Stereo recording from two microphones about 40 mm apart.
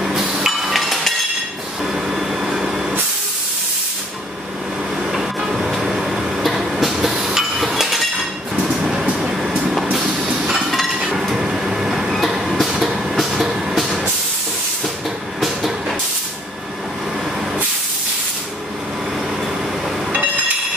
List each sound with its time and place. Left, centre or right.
0.0 s train: centre
1.9 s vehicle: centre
5.1 s printer: centre
6.8 s train: centre
8.5 s train: centre
9.2 s vehicle: centre
10.7 s a sound: centre
11.3 s train: centre
13.7 s vehicle: centre
15.4 s train: centre